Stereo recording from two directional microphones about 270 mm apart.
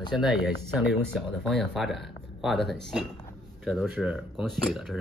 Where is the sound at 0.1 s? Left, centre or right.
Centre.